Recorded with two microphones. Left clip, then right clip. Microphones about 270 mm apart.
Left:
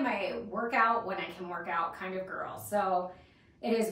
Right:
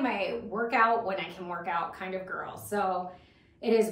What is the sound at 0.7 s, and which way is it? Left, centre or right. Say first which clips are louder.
A woman's voice: right 3 dB; centre.